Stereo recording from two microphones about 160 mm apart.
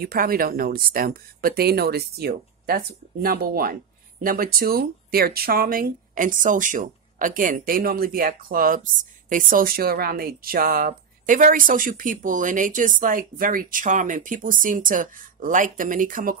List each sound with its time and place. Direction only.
0.0 s speech: 65° right (ahead or behind)